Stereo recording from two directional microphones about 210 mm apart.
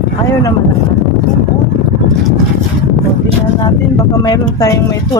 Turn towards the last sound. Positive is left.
turn(degrees=15)  # may be behind; listen again after turning